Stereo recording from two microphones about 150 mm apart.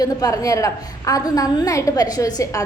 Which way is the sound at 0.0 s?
25° left (ahead or behind).